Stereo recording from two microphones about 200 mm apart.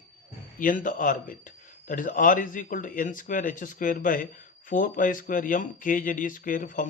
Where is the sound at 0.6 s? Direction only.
40° left (ahead or behind).